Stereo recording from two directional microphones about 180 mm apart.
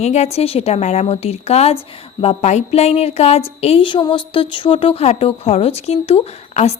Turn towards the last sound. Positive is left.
turn(degrees=35)  # may be behind; listen again after turning